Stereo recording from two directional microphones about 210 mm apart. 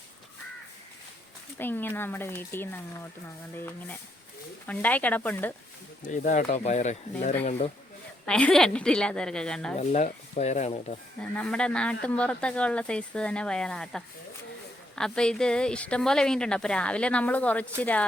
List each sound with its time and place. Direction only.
1.5 s speech: 10° left (ahead or behind)
4.6 s speech: 5° left (ahead or behind)
6.0 s speech: 35° left (ahead or behind)
8.2 s a woman's voice: 5° left (ahead or behind)
9.7 s speech: 35° left (ahead or behind)
11.2 s a woman's voice: 5° left (ahead or behind)